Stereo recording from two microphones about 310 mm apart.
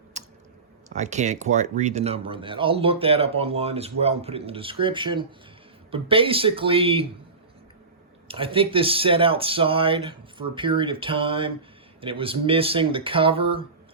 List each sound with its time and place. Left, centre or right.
0.1 s squish: right
0.9 s speech: right
8.3 s speech: centre